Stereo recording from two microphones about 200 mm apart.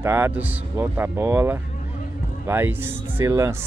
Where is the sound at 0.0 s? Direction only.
10° right (ahead or behind).